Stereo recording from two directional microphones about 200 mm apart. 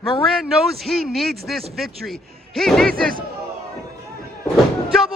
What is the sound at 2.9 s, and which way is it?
Speech, 45° right (ahead or behind).